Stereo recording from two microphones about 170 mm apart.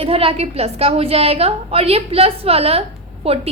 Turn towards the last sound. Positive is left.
turn(degrees=-35)  # may be behind; listen again after turning